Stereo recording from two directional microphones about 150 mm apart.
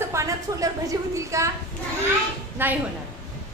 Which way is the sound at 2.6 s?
15° right (ahead or behind).